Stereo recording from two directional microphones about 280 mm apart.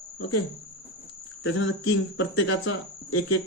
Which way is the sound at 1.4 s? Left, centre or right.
Left.